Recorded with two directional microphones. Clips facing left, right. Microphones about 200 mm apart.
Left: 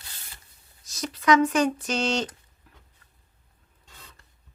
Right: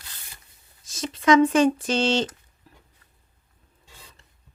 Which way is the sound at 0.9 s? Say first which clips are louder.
Right 3 dB; 25° right (ahead or behind).